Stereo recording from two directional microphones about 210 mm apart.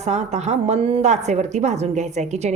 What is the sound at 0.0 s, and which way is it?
A woman's voice, 30° right (ahead or behind).